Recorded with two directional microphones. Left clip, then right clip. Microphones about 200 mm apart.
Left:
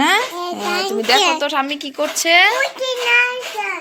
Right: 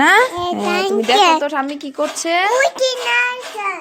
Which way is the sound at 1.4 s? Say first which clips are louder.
Even; 20° right (ahead or behind).